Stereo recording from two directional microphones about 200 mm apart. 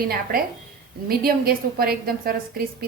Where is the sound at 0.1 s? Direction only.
45° right (ahead or behind).